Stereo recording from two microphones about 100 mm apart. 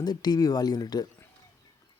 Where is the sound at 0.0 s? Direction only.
45° left (ahead or behind).